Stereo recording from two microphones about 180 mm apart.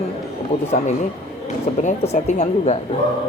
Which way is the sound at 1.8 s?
40° left (ahead or behind).